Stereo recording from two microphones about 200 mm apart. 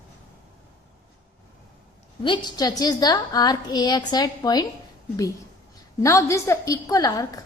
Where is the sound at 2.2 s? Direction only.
20° left (ahead or behind).